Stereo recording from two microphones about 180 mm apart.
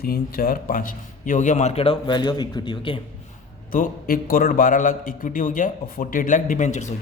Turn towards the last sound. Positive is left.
turn(degrees=40)  # may be behind; listen again after turning